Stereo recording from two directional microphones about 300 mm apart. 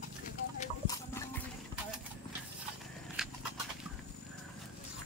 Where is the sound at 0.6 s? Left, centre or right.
Centre.